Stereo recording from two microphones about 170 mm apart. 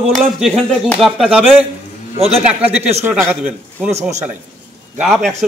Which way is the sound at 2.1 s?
35° right (ahead or behind).